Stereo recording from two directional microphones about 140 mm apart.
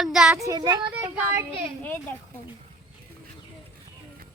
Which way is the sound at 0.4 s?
30° right (ahead or behind).